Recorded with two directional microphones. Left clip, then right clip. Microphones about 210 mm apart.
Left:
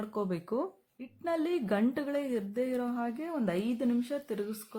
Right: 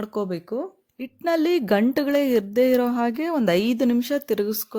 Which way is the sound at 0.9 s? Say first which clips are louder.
Right 11 dB; 40° right (ahead or behind).